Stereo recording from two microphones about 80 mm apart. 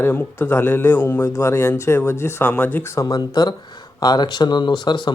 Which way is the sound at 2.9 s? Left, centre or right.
Left.